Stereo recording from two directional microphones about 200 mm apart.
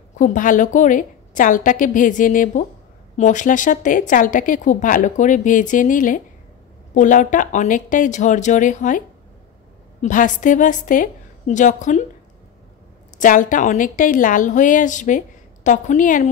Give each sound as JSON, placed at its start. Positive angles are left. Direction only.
{"t": 0.1, "sound": "speech", "side_deg": 40}
{"t": 10.0, "sound": "speech", "side_deg": 40}
{"t": 13.2, "sound": "speech", "side_deg": 40}